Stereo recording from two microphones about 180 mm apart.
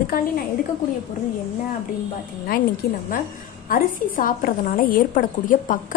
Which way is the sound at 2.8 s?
60° left (ahead or behind).